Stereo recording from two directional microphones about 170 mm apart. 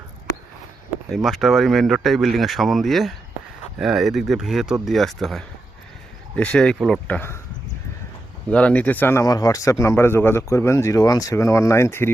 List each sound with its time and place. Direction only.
1.1 s speech: centre (ahead or behind)
8.4 s speech: 5° left (ahead or behind)